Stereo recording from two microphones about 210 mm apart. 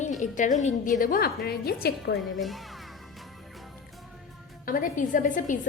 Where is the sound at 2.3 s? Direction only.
Centre (ahead or behind).